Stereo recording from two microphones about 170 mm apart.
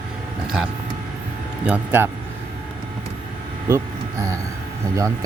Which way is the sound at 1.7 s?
10° right (ahead or behind).